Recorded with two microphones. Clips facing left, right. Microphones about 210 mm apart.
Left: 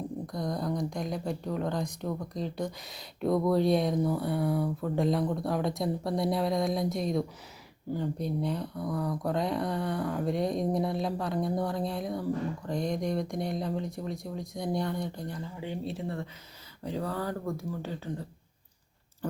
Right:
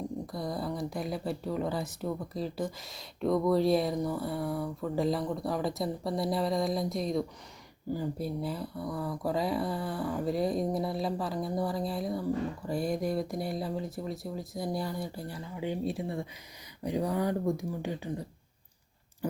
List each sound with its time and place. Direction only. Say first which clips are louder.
0.3 s speech: left 5 dB; 5° right (ahead or behind)